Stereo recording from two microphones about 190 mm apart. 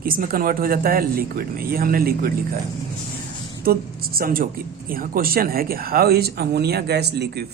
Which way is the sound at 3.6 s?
50° right (ahead or behind).